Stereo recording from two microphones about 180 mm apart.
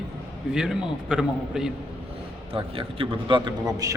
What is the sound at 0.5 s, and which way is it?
A man's voice, 5° right (ahead or behind).